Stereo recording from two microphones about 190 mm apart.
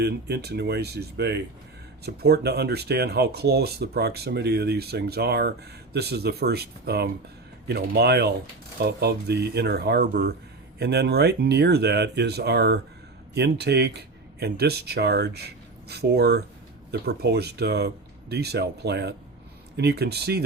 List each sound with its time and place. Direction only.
0.0 s speech: 60° right (ahead or behind)